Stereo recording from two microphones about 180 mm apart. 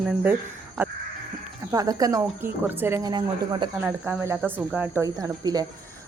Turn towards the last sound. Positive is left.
turn(degrees=-20)  # may be behind; listen again after turning